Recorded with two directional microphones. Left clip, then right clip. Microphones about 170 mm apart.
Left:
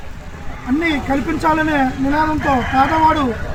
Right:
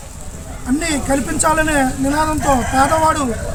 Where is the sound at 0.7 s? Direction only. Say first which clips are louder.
Even; 30° right (ahead or behind).